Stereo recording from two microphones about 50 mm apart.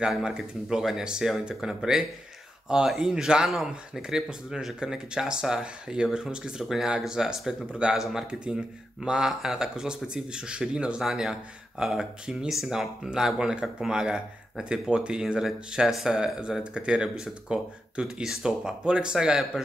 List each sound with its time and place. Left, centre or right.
0.7 s speech: centre
11.0 s speech: centre
15.9 s speech: centre
16.3 s speech: centre
18.0 s speech: centre